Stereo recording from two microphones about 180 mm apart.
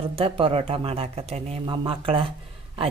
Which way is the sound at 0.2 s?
30° right (ahead or behind).